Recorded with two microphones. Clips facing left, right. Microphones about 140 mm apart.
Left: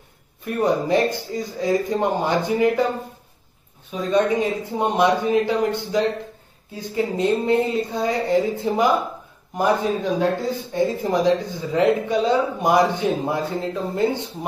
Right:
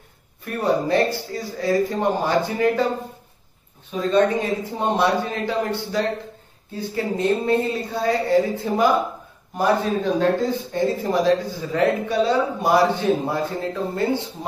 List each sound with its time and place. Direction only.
0.6 s speech: 15° left (ahead or behind)
4.1 s speech: 15° left (ahead or behind)